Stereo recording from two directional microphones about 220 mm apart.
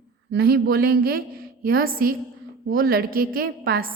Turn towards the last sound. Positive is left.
turn(degrees=-40)  # may be behind; listen again after turning